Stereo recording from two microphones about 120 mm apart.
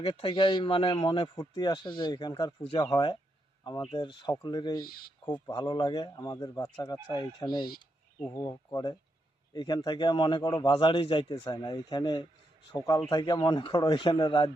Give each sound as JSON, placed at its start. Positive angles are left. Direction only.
{"t": 0.0, "sound": "speech", "side_deg": 45}